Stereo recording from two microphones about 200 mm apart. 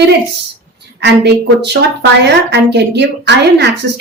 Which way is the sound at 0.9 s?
55° right (ahead or behind).